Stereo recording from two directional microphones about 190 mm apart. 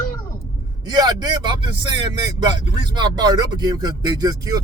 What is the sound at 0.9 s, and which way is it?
Speech, 20° right (ahead or behind).